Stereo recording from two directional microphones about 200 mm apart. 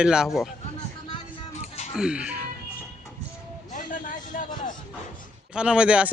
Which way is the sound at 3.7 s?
40° left (ahead or behind).